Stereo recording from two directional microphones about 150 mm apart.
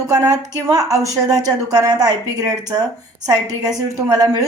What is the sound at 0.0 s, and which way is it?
A woman's voice, 20° right (ahead or behind).